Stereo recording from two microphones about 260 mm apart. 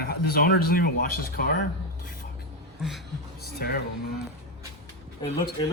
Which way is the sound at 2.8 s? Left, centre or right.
Centre.